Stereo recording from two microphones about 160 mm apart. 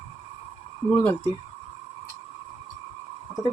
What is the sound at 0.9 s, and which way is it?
Speech, 10° left (ahead or behind).